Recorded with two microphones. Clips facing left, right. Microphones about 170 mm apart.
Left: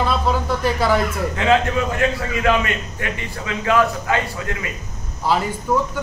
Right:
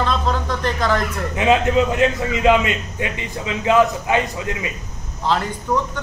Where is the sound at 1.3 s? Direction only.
20° right (ahead or behind).